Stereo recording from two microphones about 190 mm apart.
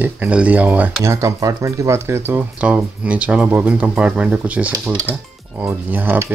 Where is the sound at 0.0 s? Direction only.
10° right (ahead or behind).